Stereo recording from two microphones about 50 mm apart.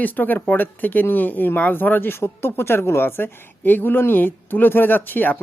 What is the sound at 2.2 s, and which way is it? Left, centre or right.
A woman's voice, left.